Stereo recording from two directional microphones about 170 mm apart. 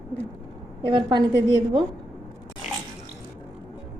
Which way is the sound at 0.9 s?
30° right (ahead or behind).